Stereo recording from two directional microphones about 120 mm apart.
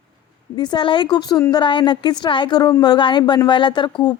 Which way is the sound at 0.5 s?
40° left (ahead or behind).